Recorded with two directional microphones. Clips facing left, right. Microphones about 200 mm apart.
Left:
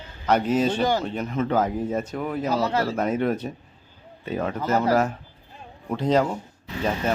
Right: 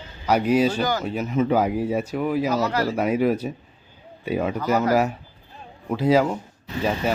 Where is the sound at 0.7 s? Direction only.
25° left (ahead or behind).